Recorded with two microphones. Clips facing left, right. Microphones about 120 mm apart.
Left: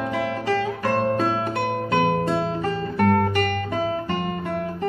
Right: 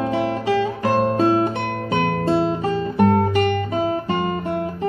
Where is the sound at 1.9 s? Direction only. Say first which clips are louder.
Left 1 dB; 15° left (ahead or behind).